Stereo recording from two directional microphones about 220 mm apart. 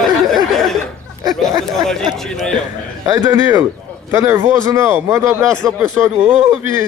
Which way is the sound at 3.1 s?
15° right (ahead or behind).